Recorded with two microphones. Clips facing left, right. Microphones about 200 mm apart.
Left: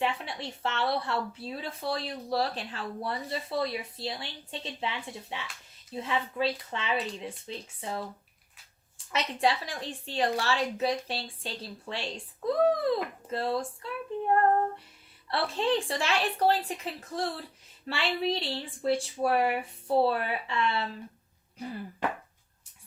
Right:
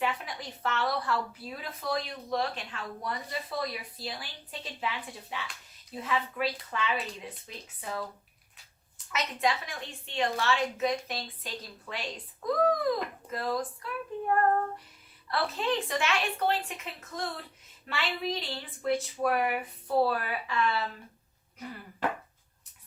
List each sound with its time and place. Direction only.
0.0 s speech: 30° left (ahead or behind)
9.1 s a woman's voice: 30° left (ahead or behind)
15.3 s a woman's voice: 30° left (ahead or behind)